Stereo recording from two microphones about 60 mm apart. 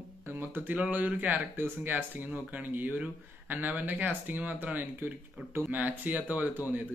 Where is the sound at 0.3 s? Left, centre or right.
Right.